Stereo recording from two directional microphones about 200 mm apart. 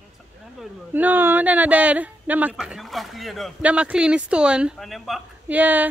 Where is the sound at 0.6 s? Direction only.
10° right (ahead or behind).